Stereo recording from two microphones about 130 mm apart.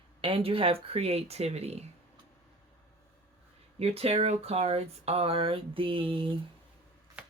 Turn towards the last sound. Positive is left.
turn(degrees=-5)  # may be behind; listen again after turning